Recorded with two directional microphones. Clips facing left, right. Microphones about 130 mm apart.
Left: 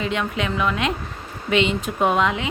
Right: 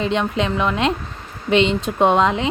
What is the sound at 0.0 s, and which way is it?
A woman's voice, 30° right (ahead or behind).